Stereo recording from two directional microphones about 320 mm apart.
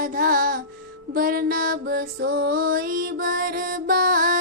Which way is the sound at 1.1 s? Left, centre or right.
Right.